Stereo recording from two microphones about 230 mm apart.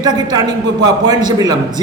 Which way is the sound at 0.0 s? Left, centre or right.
Centre.